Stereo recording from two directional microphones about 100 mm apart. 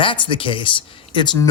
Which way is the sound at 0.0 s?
55° left (ahead or behind).